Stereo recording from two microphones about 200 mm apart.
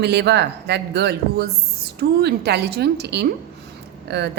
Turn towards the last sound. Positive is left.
turn(degrees=-55)  # may be behind; listen again after turning